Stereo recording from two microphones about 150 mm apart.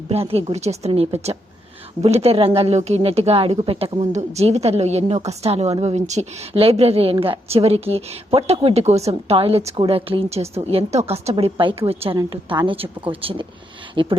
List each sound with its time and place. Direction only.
0.1 s a woman's voice: 40° right (ahead or behind)